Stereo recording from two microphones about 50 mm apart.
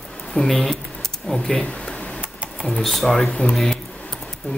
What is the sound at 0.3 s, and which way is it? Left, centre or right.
Speech, centre.